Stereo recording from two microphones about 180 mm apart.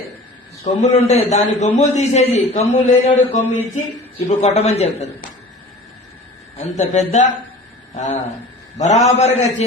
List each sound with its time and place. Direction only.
0.6 s a man's voice: 40° left (ahead or behind)
6.6 s a man's voice: 40° left (ahead or behind)